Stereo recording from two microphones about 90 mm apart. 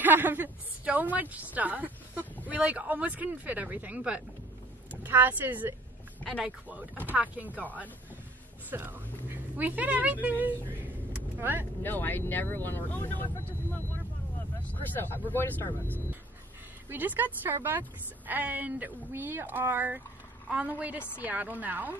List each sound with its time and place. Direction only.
0.0 s a woman's voice: 20° right (ahead or behind)
7.1 s a woman's voice: 20° right (ahead or behind)
8.6 s a woman's voice: 20° right (ahead or behind)
11.8 s speech: 20° left (ahead or behind)
14.6 s vehicle: 20° left (ahead or behind)
15.2 s speech: 20° left (ahead or behind)
16.9 s a woman's voice: 20° right (ahead or behind)